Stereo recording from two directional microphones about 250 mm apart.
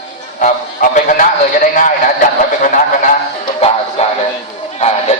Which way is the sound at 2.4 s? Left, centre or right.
Left.